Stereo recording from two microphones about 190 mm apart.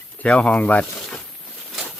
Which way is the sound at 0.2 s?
5° left (ahead or behind).